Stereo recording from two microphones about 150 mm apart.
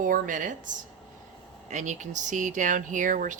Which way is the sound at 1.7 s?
55° right (ahead or behind).